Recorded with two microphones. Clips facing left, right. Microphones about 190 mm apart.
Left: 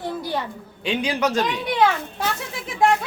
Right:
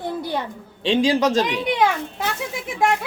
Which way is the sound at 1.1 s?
25° right (ahead or behind).